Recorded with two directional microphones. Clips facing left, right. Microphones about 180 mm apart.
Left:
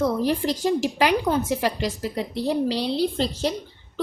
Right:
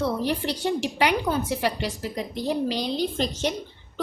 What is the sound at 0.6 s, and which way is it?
A woman's voice, 35° left (ahead or behind).